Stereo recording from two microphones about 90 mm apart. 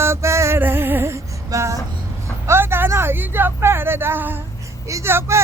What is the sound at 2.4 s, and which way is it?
Speech, 25° right (ahead or behind).